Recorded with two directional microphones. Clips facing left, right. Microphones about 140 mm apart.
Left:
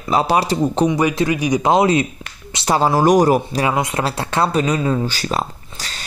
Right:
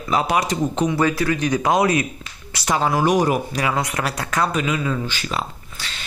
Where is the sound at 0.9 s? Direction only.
15° left (ahead or behind).